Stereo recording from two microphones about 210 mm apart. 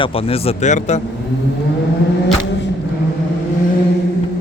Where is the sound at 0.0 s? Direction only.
25° left (ahead or behind).